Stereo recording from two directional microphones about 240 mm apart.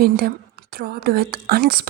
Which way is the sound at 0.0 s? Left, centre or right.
Right.